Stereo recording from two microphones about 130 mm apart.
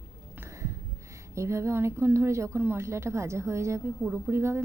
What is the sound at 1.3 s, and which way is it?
A woman's voice, 20° right (ahead or behind).